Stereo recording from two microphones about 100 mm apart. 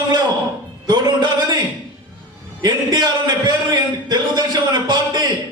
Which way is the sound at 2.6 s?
45° right (ahead or behind).